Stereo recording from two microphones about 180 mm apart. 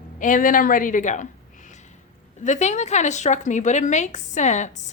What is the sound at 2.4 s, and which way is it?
Speech, 40° left (ahead or behind).